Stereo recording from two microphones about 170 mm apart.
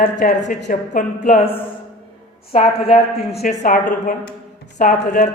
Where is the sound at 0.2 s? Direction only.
45° left (ahead or behind).